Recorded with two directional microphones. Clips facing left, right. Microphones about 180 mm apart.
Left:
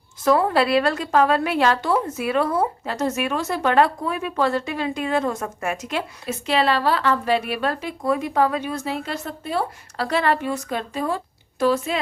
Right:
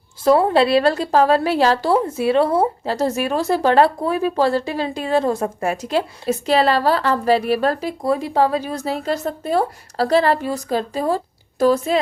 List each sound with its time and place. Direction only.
0.3 s a woman's voice: 25° right (ahead or behind)